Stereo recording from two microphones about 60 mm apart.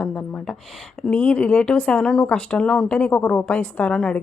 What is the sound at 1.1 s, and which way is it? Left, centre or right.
A woman's voice, left.